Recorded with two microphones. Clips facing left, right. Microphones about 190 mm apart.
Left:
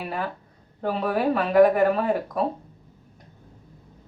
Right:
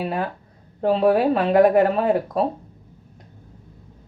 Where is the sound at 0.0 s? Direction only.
25° right (ahead or behind).